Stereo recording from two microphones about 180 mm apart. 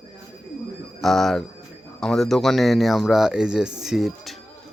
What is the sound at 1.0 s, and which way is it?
Speech, centre (ahead or behind).